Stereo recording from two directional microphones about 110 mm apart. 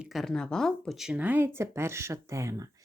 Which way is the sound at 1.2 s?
15° right (ahead or behind).